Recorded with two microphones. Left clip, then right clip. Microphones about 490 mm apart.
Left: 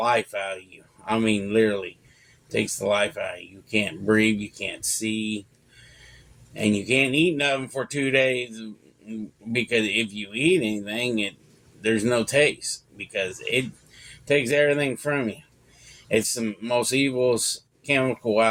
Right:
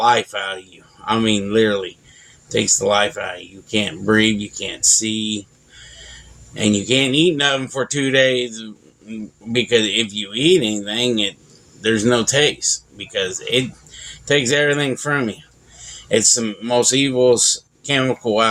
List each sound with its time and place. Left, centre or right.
0.0 s speech: left
6.5 s speech: left